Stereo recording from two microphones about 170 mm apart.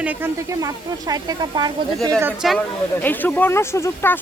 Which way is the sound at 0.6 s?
20° right (ahead or behind).